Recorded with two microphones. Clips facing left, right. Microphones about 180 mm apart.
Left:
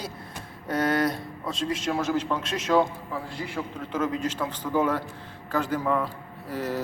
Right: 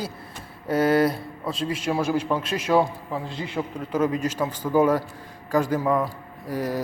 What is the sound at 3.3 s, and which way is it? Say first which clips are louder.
Speech: right 4 dB; 20° right (ahead or behind).